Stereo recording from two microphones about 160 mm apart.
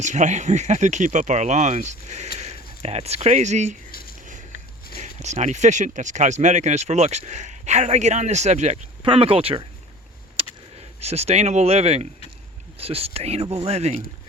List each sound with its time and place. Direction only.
0.0 s speech: 50° right (ahead or behind)
4.9 s speech: 45° right (ahead or behind)
10.8 s speech: 40° right (ahead or behind)